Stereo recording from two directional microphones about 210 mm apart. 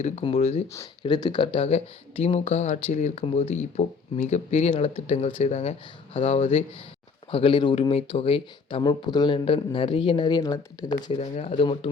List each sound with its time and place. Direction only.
0.0 s speech: 30° left (ahead or behind)
0.7 s speech: 20° left (ahead or behind)